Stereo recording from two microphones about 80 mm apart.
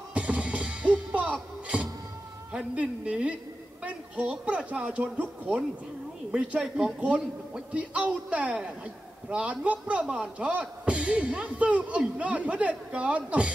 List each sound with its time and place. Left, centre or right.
0.1 s music: centre
2.5 s a man's voice: centre